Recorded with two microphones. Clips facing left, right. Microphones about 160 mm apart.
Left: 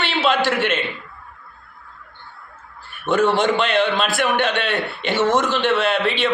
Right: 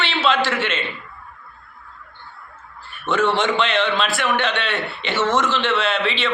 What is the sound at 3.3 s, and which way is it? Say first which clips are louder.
Speech: left 2 dB; 45° left (ahead or behind).